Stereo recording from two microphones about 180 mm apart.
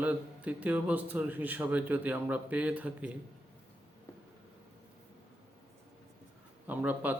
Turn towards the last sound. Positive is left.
turn(degrees=-10)  # may be behind; listen again after turning